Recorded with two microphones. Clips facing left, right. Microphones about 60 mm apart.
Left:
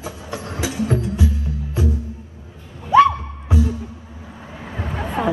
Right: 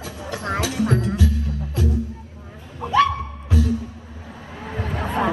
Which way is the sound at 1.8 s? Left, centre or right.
Left.